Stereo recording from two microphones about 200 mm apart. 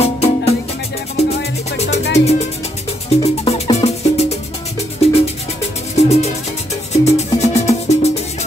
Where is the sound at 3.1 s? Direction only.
30° left (ahead or behind).